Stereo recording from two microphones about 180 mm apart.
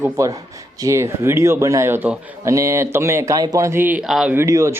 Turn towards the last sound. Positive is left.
turn(degrees=-15)  # may be behind; listen again after turning